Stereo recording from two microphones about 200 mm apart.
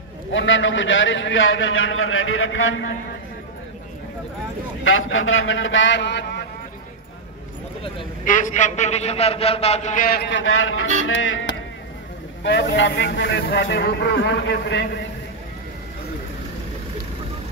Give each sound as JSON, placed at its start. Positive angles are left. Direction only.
{"t": 0.3, "sound": "a man's voice", "side_deg": 75}
{"t": 4.8, "sound": "a man's voice", "side_deg": 80}
{"t": 8.3, "sound": "a man's voice", "side_deg": 40}
{"t": 10.3, "sound": "speech", "side_deg": 80}
{"t": 11.1, "sound": "a man's voice", "side_deg": 75}
{"t": 12.4, "sound": "a man's voice", "side_deg": 60}